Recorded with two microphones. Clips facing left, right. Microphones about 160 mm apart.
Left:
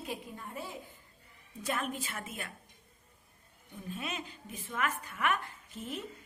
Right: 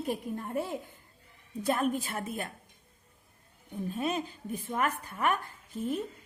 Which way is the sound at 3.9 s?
35° right (ahead or behind).